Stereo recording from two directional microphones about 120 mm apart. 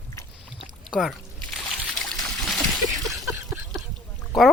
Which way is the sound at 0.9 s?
Centre (ahead or behind).